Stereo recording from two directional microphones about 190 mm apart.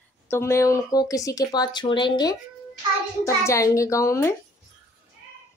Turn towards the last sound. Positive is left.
turn(degrees=15)  # may be behind; listen again after turning